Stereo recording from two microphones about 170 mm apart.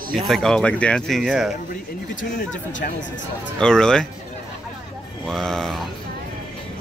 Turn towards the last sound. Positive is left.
turn(degrees=0)  # may be behind; listen again after turning